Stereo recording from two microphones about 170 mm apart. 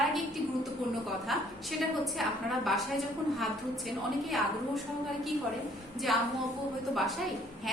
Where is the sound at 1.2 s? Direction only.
Centre (ahead or behind).